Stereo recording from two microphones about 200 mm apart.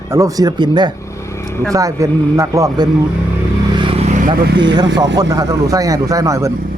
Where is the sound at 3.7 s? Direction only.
25° right (ahead or behind).